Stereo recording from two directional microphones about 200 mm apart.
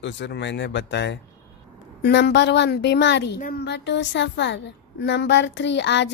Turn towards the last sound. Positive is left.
turn(degrees=60)  # may be behind; listen again after turning